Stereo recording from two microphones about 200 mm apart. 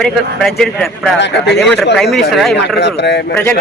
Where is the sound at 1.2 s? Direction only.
60° left (ahead or behind).